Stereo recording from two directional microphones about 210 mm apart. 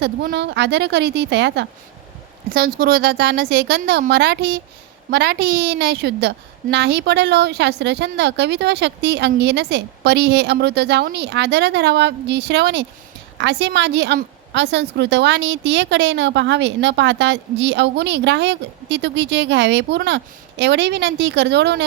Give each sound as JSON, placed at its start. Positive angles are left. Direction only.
{"t": 0.0, "sound": "a woman's voice", "side_deg": -50}
{"t": 2.5, "sound": "a woman's voice", "side_deg": -45}